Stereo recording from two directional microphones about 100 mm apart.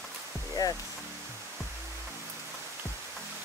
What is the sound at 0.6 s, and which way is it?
Speech, 35° left (ahead or behind).